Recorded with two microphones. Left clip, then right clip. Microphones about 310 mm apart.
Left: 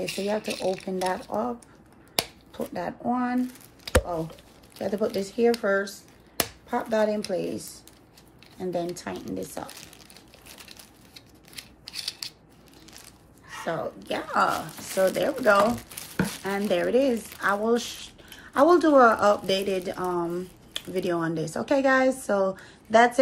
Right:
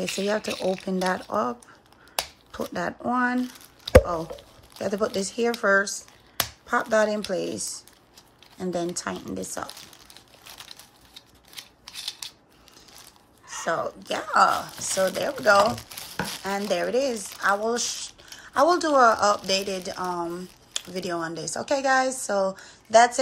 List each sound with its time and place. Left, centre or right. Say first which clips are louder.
0.1 s speech: right 2 dB; right
2.5 s speech: right 2 dB; right
4.7 s speech: right 1 dB; right
10.7 s scissors: right 2 dB; centre
13.5 s speech: right 3 dB; right